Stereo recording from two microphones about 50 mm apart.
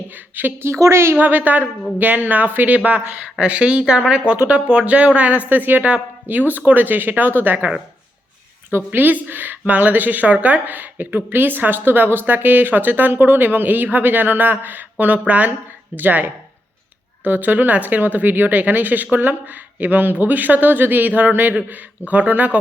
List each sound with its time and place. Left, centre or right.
0.1 s a sound: right
0.6 s a woman's voice: right
1.1 s a woman's voice: right
8.9 s a woman's voice: right